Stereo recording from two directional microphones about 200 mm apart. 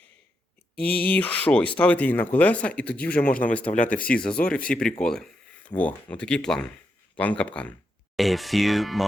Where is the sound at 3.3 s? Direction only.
40° left (ahead or behind).